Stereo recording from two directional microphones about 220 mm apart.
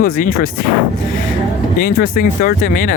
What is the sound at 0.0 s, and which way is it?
Speech, 40° left (ahead or behind).